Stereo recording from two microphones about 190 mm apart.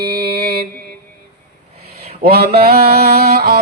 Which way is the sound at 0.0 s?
55° right (ahead or behind).